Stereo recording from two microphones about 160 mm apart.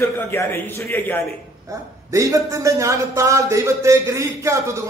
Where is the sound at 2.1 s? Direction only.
20° right (ahead or behind).